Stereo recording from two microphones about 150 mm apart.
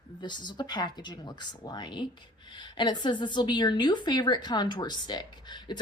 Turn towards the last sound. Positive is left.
turn(degrees=30)  # may be behind; listen again after turning